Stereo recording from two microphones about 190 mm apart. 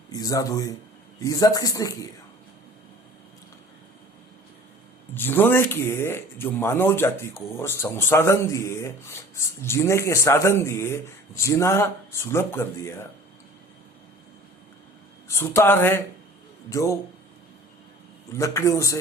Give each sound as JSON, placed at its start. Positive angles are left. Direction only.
{"t": 0.1, "sound": "speech", "side_deg": 20}
{"t": 5.1, "sound": "speech", "side_deg": 10}
{"t": 15.3, "sound": "speech", "side_deg": 15}
{"t": 18.3, "sound": "speech", "side_deg": 15}